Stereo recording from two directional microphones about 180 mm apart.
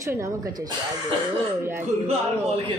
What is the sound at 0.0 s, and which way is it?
Speech, 15° right (ahead or behind).